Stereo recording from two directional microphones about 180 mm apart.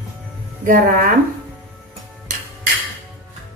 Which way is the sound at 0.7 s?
50° right (ahead or behind).